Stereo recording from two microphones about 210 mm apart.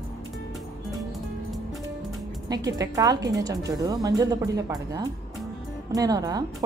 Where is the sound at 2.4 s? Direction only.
15° right (ahead or behind).